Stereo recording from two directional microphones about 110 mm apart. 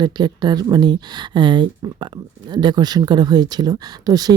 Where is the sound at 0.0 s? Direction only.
40° right (ahead or behind).